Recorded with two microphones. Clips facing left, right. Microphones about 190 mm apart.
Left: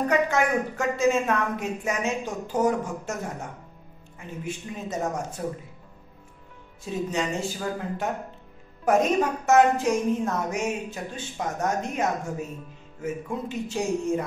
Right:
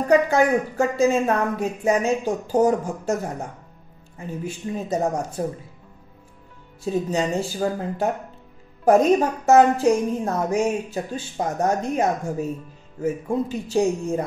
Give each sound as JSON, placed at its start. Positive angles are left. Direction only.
{"t": 0.1, "sound": "speech", "side_deg": -35}
{"t": 4.5, "sound": "speech", "side_deg": -35}
{"t": 6.8, "sound": "speech", "side_deg": -35}